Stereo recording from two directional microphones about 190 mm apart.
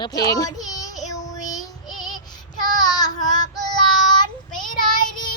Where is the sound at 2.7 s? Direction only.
20° left (ahead or behind).